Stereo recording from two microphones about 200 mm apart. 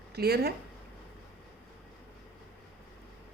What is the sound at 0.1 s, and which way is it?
Speech, 50° right (ahead or behind).